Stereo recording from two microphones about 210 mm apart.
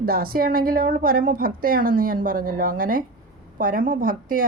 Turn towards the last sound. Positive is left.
turn(degrees=-40)  # may be behind; listen again after turning